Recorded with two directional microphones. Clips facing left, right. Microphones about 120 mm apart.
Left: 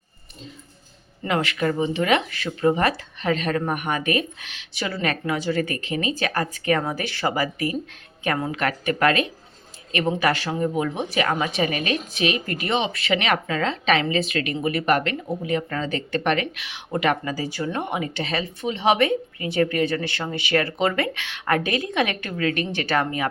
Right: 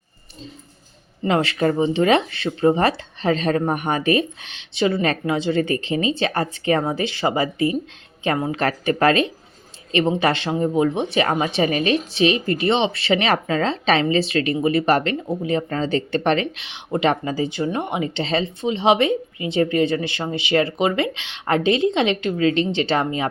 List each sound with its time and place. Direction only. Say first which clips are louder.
1.2 s speech: right 4 dB; 30° right (ahead or behind)